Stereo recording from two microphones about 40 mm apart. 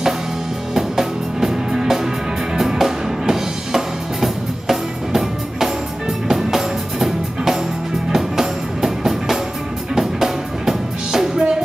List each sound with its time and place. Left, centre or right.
0.7 s music: centre
11.3 s music: centre